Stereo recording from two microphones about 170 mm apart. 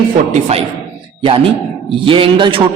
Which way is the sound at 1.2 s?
30° right (ahead or behind).